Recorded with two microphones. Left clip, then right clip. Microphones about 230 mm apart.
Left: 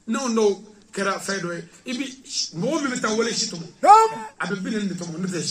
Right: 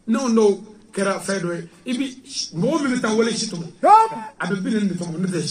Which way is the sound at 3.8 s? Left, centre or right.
Left.